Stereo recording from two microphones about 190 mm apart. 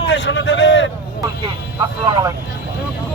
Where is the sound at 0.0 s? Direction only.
70° left (ahead or behind).